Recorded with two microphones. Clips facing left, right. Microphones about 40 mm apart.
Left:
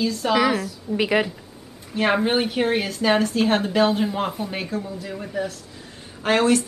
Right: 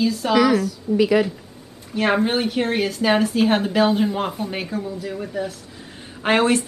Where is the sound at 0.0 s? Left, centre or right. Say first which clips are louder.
Right 2 dB; centre.